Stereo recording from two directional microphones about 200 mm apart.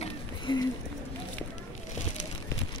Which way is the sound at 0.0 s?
20° left (ahead or behind).